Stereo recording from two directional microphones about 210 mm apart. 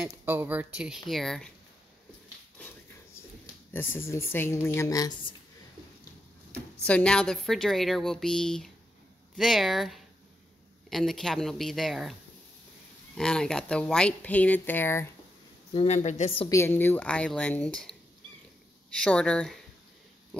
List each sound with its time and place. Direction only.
0.2 s speech: 10° right (ahead or behind)
3.7 s speech: 10° left (ahead or behind)
6.9 s speech: 5° left (ahead or behind)
15.7 s a woman's voice: 30° left (ahead or behind)
16.4 s speech: 10° left (ahead or behind)